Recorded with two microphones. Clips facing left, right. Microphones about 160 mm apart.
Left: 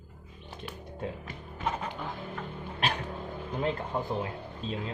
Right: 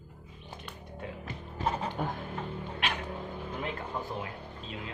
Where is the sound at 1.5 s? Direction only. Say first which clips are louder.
Right 2 dB; 35° right (ahead or behind).